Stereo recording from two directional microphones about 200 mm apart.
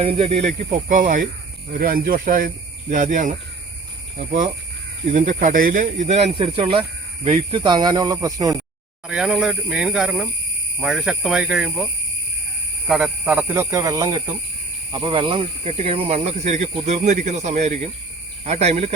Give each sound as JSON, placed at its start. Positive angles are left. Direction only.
{"t": 0.7, "sound": "speech", "side_deg": -40}
{"t": 5.1, "sound": "speech", "side_deg": -40}
{"t": 9.0, "sound": "speech", "side_deg": -5}
{"t": 12.9, "sound": "speech", "side_deg": -5}